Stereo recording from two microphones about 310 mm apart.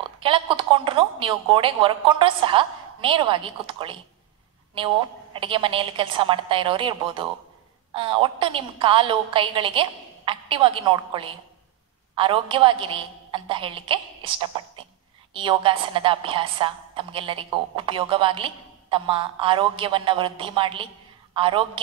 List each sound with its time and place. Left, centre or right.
0.2 s a woman's voice: centre